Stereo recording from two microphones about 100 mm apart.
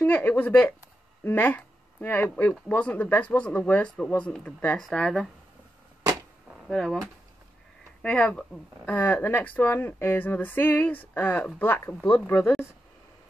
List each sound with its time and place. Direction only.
0.0 s speech: 20° left (ahead or behind)
6.7 s speech: centre (ahead or behind)
8.0 s speech: 10° left (ahead or behind)